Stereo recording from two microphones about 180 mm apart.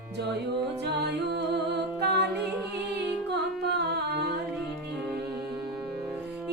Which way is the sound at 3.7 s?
65° right (ahead or behind).